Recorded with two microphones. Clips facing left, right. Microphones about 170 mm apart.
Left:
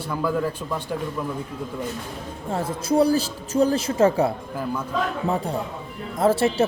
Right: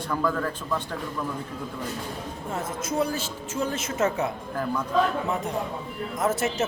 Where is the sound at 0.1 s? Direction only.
10° left (ahead or behind).